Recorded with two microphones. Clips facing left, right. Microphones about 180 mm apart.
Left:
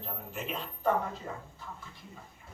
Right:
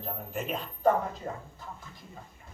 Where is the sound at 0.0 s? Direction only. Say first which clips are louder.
Right 4 dB; 45° right (ahead or behind).